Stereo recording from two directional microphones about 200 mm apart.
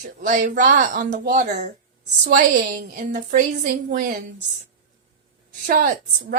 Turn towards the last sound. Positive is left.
turn(degrees=-40)  # may be behind; listen again after turning